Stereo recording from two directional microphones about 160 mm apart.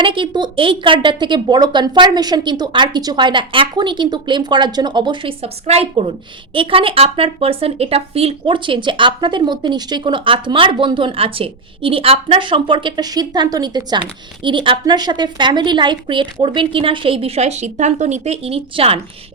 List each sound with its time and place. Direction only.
0.0 s a woman's voice: 30° right (ahead or behind)